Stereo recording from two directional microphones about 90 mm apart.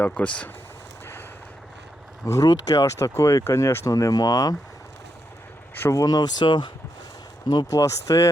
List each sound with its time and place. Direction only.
0.0 s speech: 15° left (ahead or behind)
2.2 s speech: 40° left (ahead or behind)
3.9 s speech: 45° left (ahead or behind)
5.8 s speech: 35° left (ahead or behind); by 7.7 s 55° left (ahead or behind)
7.7 s speech: 35° left (ahead or behind)